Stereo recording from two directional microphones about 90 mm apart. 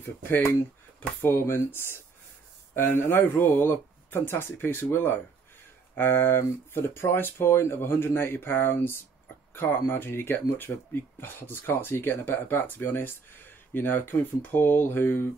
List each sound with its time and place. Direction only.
0.0 s speech: 20° left (ahead or behind)